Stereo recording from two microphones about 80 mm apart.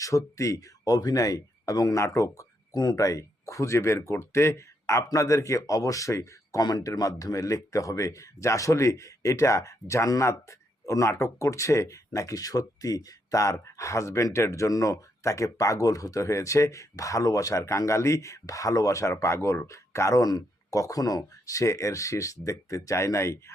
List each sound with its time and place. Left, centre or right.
0.0 s speech: left
6.6 s speech: left